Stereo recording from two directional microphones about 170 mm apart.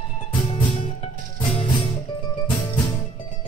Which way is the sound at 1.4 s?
30° left (ahead or behind).